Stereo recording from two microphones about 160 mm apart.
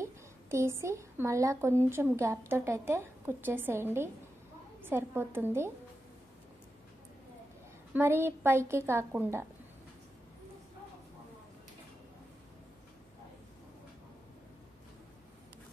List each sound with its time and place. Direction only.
0.0 s a woman's voice: 15° right (ahead or behind)
7.9 s a woman's voice: 15° right (ahead or behind)